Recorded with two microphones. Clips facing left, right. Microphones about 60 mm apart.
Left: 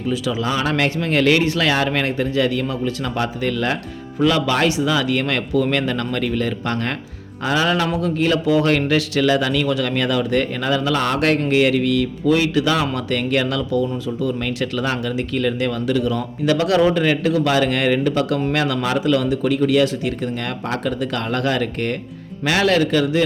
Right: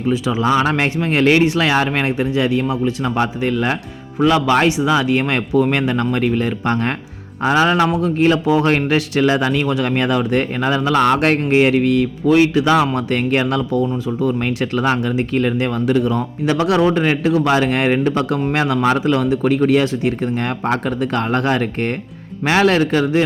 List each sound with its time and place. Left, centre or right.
0.1 s a man's voice: right